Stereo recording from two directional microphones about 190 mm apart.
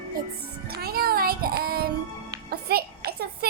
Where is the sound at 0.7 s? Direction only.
55° right (ahead or behind).